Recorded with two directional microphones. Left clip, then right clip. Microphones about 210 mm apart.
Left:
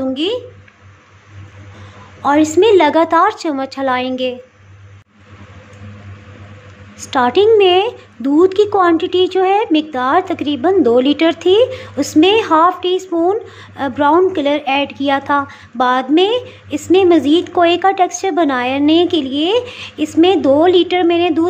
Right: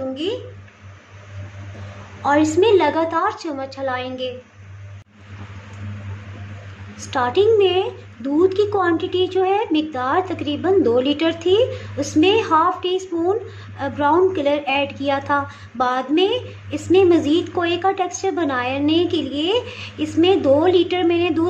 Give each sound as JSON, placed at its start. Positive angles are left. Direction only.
{"t": 0.1, "sound": "speech", "side_deg": 40}
{"t": 2.2, "sound": "a woman's voice", "side_deg": 25}
{"t": 7.1, "sound": "a woman's voice", "side_deg": 20}